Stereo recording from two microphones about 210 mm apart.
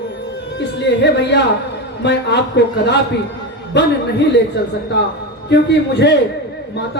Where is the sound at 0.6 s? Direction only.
55° left (ahead or behind).